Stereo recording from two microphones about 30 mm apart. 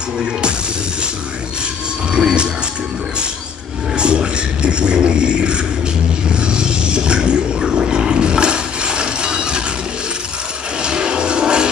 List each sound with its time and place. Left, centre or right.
2.1 s a sound: right
3.9 s music: right
6.4 s roaring cats: right
10.8 s music: right